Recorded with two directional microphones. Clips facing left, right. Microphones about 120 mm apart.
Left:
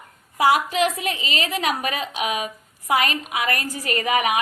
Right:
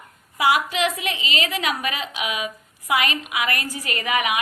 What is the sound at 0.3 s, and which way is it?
A woman's voice, 40° left (ahead or behind).